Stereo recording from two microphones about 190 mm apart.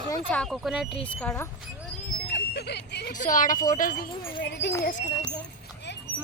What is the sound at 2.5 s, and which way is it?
Speech, 60° left (ahead or behind).